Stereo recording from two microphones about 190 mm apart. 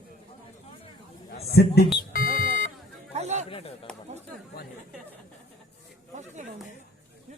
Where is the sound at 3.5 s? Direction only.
30° left (ahead or behind).